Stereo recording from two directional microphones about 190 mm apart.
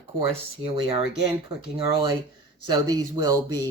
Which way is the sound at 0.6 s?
25° right (ahead or behind).